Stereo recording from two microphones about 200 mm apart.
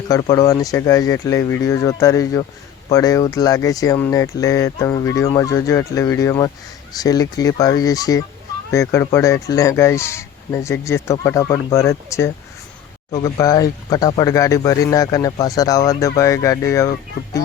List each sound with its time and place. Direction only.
0.1 s speech: 20° left (ahead or behind)